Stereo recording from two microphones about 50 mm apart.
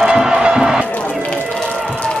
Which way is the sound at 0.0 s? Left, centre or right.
Centre.